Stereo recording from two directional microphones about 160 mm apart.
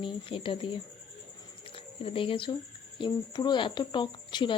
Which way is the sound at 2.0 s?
35° left (ahead or behind).